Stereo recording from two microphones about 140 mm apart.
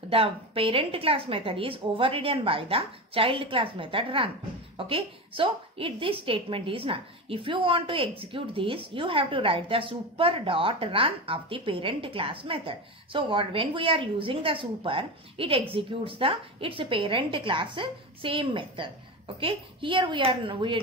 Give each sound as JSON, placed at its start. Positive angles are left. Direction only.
{"t": 0.1, "sound": "a woman's voice", "side_deg": -40}